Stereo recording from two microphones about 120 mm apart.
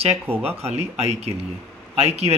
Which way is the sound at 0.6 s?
60° right (ahead or behind).